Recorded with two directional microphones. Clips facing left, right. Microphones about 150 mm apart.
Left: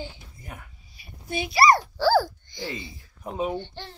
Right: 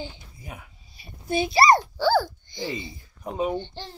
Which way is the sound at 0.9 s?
30° right (ahead or behind).